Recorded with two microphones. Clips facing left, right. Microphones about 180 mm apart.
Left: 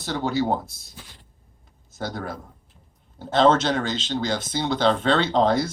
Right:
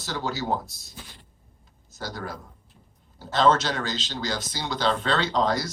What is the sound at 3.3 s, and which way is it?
Speech, 50° left (ahead or behind).